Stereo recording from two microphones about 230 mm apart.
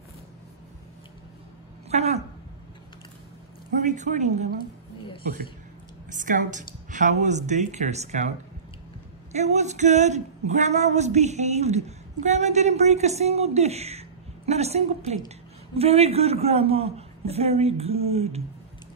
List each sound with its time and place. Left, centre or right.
1.9 s speech: right
3.8 s speech: right
6.0 s speech: right
9.3 s speech: right